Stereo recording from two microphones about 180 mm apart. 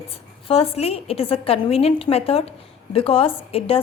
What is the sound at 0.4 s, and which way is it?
Speech, 30° left (ahead or behind).